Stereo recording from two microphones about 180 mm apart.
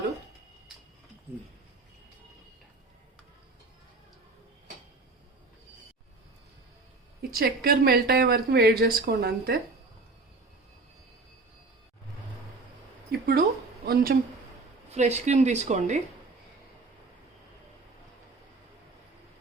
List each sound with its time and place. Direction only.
7.2 s speech: 55° right (ahead or behind)
13.1 s a sound: 60° right (ahead or behind)
14.8 s speech: 40° right (ahead or behind)